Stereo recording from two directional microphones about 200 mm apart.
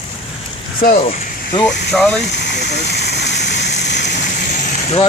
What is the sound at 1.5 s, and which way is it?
Speech, 5° left (ahead or behind).